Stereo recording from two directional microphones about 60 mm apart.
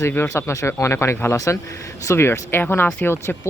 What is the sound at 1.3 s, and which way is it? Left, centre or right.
Speech, left.